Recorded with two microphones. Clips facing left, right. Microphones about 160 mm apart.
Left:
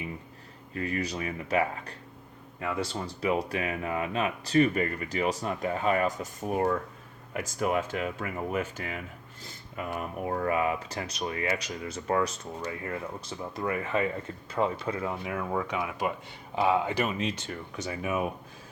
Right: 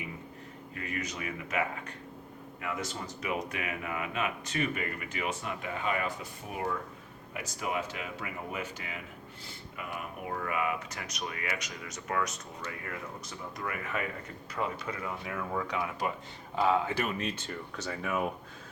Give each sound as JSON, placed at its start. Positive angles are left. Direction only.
{"t": 0.7, "sound": "speech", "side_deg": 35}
{"t": 9.7, "sound": "speech", "side_deg": 40}